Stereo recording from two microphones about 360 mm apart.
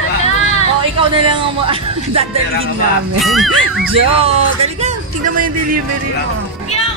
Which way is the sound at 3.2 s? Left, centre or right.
Centre.